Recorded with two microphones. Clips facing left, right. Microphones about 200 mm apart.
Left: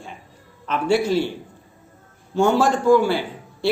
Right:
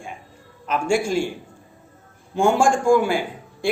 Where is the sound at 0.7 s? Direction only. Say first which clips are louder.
Left 1 dB; 10° right (ahead or behind).